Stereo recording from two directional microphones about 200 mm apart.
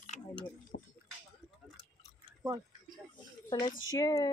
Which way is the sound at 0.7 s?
55° left (ahead or behind).